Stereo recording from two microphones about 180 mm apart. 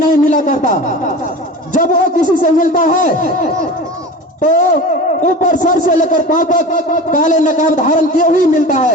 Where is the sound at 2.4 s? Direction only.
45° left (ahead or behind).